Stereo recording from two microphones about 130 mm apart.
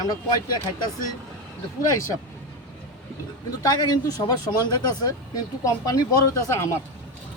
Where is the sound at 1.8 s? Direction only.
25° left (ahead or behind).